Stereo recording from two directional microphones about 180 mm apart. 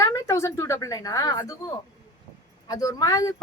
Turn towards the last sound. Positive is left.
turn(degrees=20)  # may be behind; listen again after turning